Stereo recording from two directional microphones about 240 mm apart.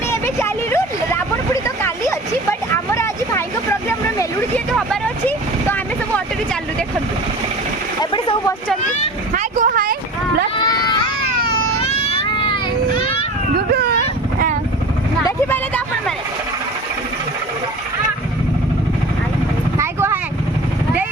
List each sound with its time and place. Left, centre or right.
0.1 s vehicle: centre
8.1 s vehicle: left
9.3 s vehicle: right
10.6 s run: centre
11.9 s baby cry: left
15.2 s a sound: centre
19.8 s vehicle: centre